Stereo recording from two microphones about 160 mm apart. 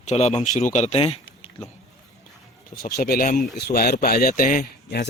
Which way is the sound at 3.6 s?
80° left.